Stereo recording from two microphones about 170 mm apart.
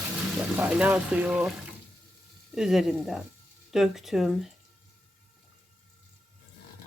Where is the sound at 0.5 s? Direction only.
10° right (ahead or behind).